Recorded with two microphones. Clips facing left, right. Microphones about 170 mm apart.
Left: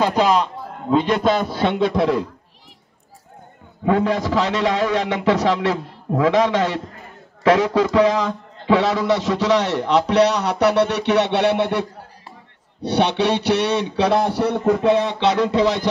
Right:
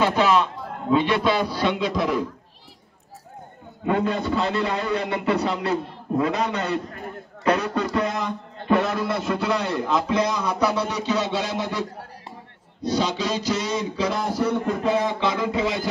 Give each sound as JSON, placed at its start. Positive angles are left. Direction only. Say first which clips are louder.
{"t": 1.0, "sound": "a man's voice", "louder": "left 3 dB", "side_deg": 45}
{"t": 3.8, "sound": "a man's voice", "louder": "left 4 dB", "side_deg": 80}
{"t": 12.8, "sound": "a man's voice", "louder": "left 5 dB", "side_deg": 65}